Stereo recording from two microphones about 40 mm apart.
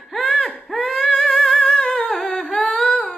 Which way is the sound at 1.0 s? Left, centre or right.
Centre.